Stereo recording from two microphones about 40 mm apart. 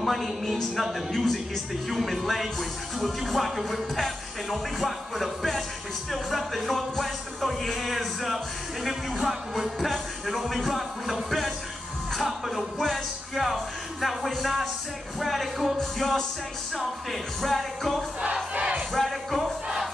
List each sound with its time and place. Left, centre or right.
0.0 s speech: centre
18.5 s battle cry: right
18.9 s music: centre